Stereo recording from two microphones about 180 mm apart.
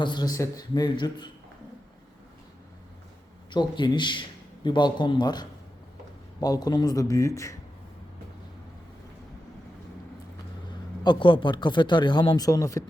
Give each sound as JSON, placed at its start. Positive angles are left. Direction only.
{"t": 0.0, "sound": "a man's voice", "side_deg": 25}
{"t": 3.5, "sound": "a man's voice", "side_deg": 25}
{"t": 11.0, "sound": "a man's voice", "side_deg": 25}